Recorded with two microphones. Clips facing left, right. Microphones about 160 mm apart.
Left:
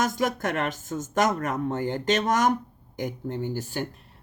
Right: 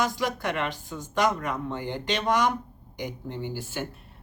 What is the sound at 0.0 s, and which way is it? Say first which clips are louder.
A woman's voice: left 2 dB; 45° left (ahead or behind).